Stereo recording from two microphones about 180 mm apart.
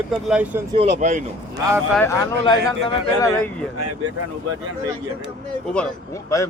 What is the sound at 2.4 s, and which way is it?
Speech, 25° left (ahead or behind).